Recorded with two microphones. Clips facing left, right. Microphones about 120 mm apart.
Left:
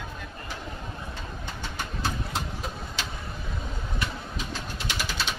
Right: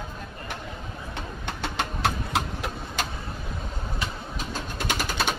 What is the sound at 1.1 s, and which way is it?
Vehicle, 70° right (ahead or behind).